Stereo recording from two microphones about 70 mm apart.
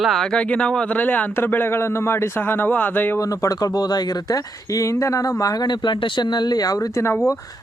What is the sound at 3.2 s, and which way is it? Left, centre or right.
Speech, left.